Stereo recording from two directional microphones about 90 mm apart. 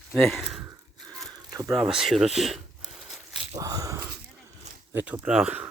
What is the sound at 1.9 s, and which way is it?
Speech, 5° right (ahead or behind).